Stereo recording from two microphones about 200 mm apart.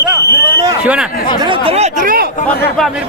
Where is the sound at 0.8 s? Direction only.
5° right (ahead or behind).